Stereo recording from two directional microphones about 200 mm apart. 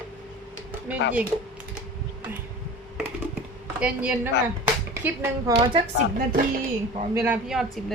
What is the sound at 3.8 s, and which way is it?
Speech, 5° right (ahead or behind).